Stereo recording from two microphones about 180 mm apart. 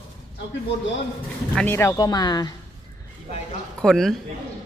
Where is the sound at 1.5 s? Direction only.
10° left (ahead or behind).